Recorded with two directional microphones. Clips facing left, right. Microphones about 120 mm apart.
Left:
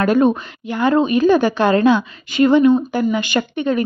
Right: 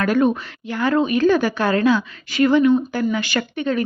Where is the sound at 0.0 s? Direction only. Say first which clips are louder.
Left 3 dB; 25° left (ahead or behind).